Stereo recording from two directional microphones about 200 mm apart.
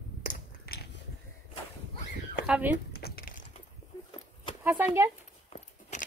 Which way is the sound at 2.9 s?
50° left (ahead or behind).